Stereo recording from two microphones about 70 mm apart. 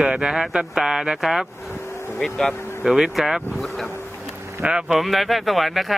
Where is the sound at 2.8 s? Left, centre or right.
Centre.